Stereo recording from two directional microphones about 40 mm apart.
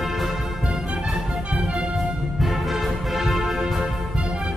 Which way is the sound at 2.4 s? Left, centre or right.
Centre.